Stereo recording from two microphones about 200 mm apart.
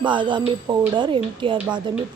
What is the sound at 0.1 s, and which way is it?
Speech, 25° right (ahead or behind).